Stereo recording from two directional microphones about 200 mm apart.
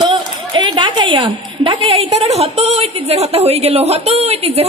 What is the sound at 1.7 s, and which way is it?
A woman's voice, 30° right (ahead or behind).